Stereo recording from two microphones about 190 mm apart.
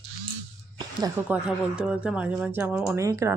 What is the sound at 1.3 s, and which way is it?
Speech, 5° right (ahead or behind).